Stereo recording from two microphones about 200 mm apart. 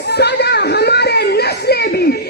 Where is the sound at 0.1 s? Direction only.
55° left (ahead or behind).